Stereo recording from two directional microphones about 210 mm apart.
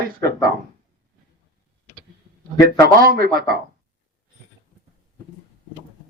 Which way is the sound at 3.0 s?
45° right (ahead or behind).